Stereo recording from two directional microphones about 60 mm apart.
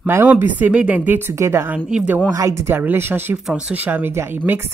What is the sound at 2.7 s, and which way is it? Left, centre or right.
Speech, right.